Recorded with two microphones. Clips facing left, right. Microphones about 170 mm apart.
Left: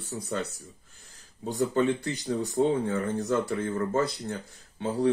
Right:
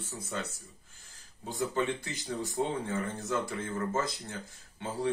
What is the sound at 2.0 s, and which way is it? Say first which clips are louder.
Speech: left 7 dB; 60° left (ahead or behind).